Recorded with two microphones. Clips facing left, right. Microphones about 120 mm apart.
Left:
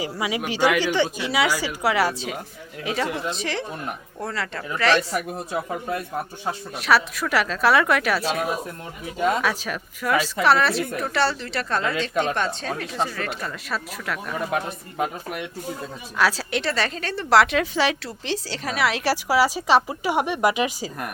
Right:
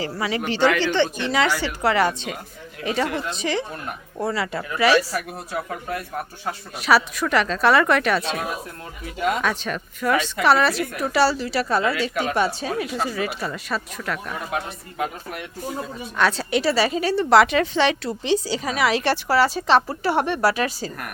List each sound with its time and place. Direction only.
0.2 s a woman's voice: 10° left (ahead or behind); by 5.0 s 10° right (ahead or behind)
5.1 s speech: 20° left (ahead or behind)
6.7 s a woman's voice: centre (ahead or behind)
16.1 s a woman's voice: 5° left (ahead or behind)